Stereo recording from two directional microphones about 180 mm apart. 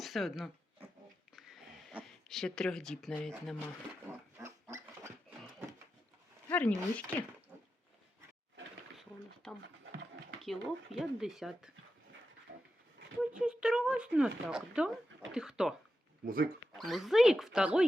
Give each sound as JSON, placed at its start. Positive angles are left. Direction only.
{"t": 0.0, "sound": "speech", "side_deg": 0}
{"t": 1.4, "sound": "a sound", "side_deg": 0}
{"t": 2.3, "sound": "speech", "side_deg": 0}
{"t": 4.0, "sound": "pig", "side_deg": -15}
{"t": 6.5, "sound": "speech", "side_deg": 10}
{"t": 9.0, "sound": "a sound", "side_deg": 5}
{"t": 9.6, "sound": "a sound", "side_deg": -80}
{"t": 10.4, "sound": "speech", "side_deg": 0}
{"t": 13.3, "sound": "speech", "side_deg": -5}
{"t": 16.2, "sound": "speech", "side_deg": -55}
{"t": 16.7, "sound": "speech", "side_deg": 0}